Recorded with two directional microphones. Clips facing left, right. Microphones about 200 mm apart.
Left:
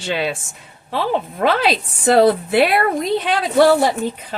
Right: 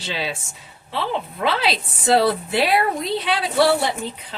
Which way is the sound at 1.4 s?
50° left (ahead or behind).